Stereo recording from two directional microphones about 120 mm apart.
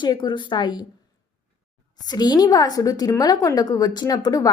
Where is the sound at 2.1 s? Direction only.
35° left (ahead or behind).